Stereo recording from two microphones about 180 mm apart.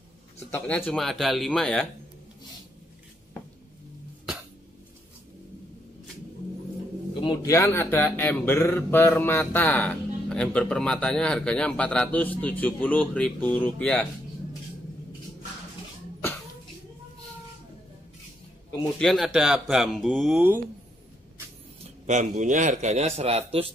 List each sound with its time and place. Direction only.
0.5 s speech: 10° left (ahead or behind)
7.2 s speech: 15° left (ahead or behind)
18.9 s speech: centre (ahead or behind)
22.0 s a man's voice: 40° right (ahead or behind)